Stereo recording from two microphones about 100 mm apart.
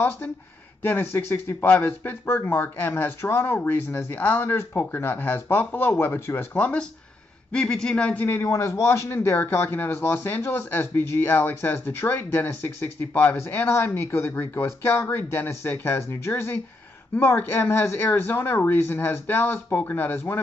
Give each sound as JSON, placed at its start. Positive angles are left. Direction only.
{"t": 1.1, "sound": "a man's voice", "side_deg": 25}
{"t": 8.4, "sound": "speech", "side_deg": 30}